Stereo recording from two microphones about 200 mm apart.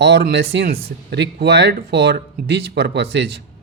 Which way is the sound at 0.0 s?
55° right (ahead or behind).